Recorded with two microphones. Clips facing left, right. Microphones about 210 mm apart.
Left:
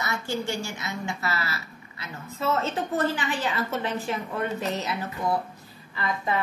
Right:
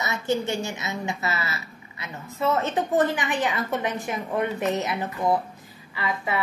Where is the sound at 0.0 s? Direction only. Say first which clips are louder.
Right 4 dB; 20° right (ahead or behind).